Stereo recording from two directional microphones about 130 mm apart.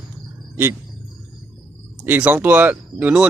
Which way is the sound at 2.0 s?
15° right (ahead or behind).